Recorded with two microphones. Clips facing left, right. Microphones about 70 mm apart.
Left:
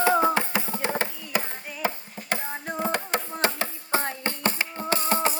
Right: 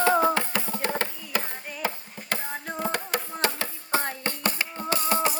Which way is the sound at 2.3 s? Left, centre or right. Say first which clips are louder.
Left 2 dB; left.